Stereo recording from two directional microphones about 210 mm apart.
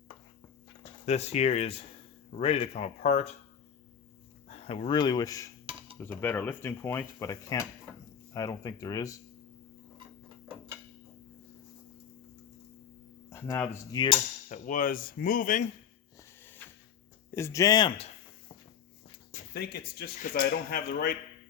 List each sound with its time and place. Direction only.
1.0 s speech: 30° left (ahead or behind)
4.4 s speech: 30° left (ahead or behind)
13.3 s cutlery: 15° left (ahead or behind)
14.5 s speech: 40° left (ahead or behind)
16.4 s a sound: 10° left (ahead or behind)
17.3 s speech: 15° left (ahead or behind)
19.5 s speech: 50° left (ahead or behind)